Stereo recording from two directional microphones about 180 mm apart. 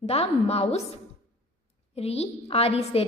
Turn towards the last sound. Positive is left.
turn(degrees=35)  # may be behind; listen again after turning